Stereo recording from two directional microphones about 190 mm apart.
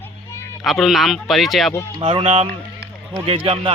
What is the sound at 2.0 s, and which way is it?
Speech, 30° right (ahead or behind).